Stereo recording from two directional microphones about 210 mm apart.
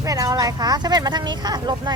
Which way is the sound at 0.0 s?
15° right (ahead or behind).